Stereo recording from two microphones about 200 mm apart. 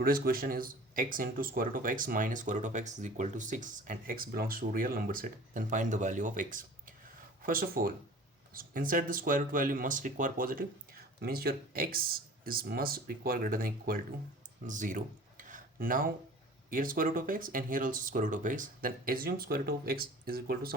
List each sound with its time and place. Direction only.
0.0 s speech: 45° right (ahead or behind)
14.7 s a sound: 40° right (ahead or behind)
16.6 s speech: 45° right (ahead or behind)